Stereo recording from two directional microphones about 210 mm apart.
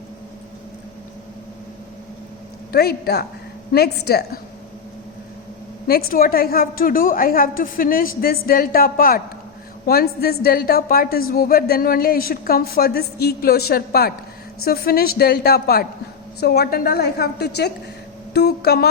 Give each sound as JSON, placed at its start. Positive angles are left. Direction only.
{"t": 2.7, "sound": "a woman's voice", "side_deg": 50}
{"t": 5.9, "sound": "a woman's voice", "side_deg": 45}